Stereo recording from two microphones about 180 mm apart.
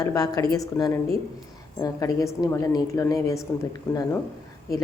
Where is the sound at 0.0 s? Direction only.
20° left (ahead or behind).